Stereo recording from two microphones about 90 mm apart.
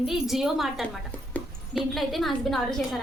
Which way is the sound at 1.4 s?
15° left (ahead or behind).